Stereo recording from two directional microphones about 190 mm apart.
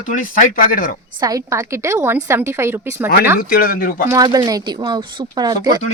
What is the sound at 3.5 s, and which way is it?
Speech, 50° left (ahead or behind).